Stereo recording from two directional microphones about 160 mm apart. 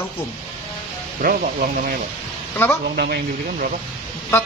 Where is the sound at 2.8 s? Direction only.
80° right.